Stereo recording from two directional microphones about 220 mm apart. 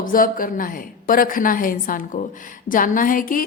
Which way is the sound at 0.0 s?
40° left (ahead or behind).